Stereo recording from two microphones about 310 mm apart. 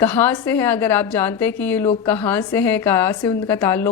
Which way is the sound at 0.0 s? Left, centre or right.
Centre.